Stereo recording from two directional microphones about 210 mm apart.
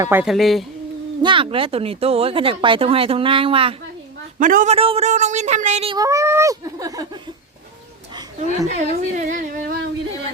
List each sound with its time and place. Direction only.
0.0 s a woman's voice: 10° right (ahead or behind)
1.2 s speech: 25° right (ahead or behind)
4.4 s speech: 40° right (ahead or behind); by 7.2 s 15° right (ahead or behind)
8.4 s speech: 30° left (ahead or behind)
9.1 s speech: 40° right (ahead or behind)